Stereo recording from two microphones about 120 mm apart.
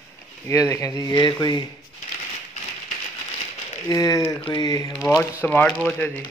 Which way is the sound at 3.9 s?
30° left (ahead or behind).